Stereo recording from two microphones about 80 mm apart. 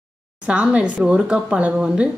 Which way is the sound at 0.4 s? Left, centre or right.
Centre.